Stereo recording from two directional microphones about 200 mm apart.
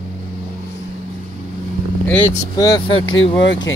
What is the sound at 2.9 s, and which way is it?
Speech, 90° left.